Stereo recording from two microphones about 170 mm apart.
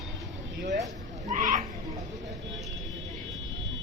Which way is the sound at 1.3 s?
50° right (ahead or behind).